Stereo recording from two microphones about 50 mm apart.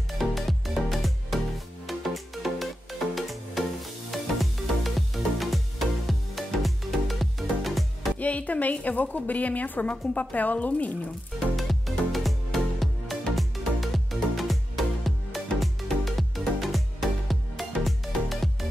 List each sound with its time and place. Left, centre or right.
0.2 s music: centre
8.2 s a woman's voice: left
11.3 s music: centre